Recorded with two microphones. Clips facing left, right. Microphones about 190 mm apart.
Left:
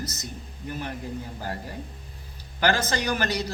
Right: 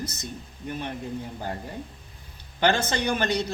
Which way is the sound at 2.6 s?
25° right (ahead or behind).